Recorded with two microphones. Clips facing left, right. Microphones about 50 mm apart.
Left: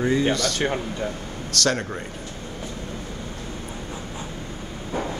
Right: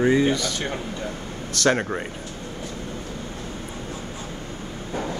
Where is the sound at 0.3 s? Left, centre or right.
Centre.